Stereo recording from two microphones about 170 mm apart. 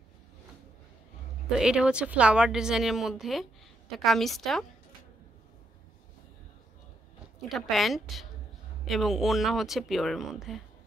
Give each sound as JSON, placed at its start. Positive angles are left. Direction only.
{"t": 1.6, "sound": "a woman's voice", "side_deg": -5}
{"t": 7.4, "sound": "a woman's voice", "side_deg": 0}